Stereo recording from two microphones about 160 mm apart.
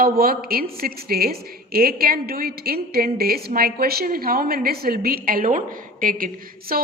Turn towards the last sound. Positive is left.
turn(degrees=-60)  # may be behind; listen again after turning